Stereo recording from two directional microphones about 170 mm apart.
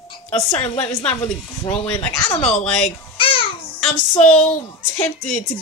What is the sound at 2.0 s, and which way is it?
Speech, 20° left (ahead or behind).